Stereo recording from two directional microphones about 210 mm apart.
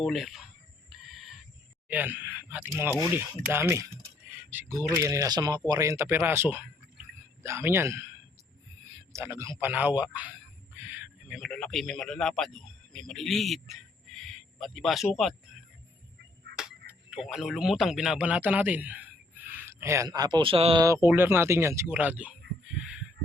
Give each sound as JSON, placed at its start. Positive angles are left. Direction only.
{"t": 0.0, "sound": "speech", "side_deg": 0}
{"t": 0.9, "sound": "a sound", "side_deg": 0}
{"t": 1.9, "sound": "speech", "side_deg": -10}
{"t": 9.1, "sound": "speech", "side_deg": -15}
{"t": 16.6, "sound": "speech", "side_deg": -5}
{"t": 20.8, "sound": "speech", "side_deg": -15}